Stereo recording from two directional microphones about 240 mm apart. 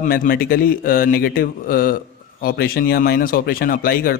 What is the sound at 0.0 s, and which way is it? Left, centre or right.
Speech, left.